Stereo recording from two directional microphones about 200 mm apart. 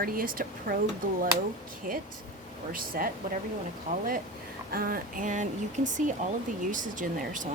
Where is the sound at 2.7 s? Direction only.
45° right (ahead or behind).